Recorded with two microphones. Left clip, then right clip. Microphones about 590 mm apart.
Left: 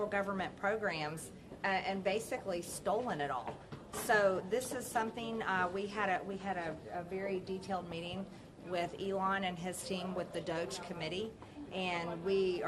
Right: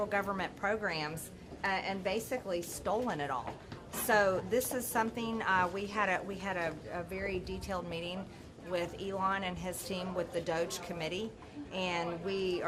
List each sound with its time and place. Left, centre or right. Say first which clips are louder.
0.1 s a woman's voice: right 2 dB; right
7.4 s a woman's voice: right 1 dB; right